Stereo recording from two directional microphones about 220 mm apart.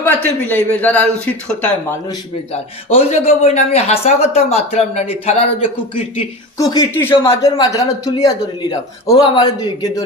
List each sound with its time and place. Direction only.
0.0 s speech: 5° left (ahead or behind)
2.0 s a man's voice: 25° left (ahead or behind)